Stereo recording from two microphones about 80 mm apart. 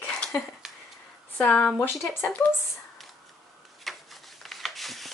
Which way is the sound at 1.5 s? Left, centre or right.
Centre.